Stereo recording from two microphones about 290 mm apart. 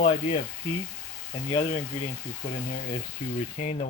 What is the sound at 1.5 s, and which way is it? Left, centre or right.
Speech, centre.